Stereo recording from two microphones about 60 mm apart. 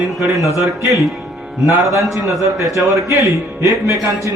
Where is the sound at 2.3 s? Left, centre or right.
Right.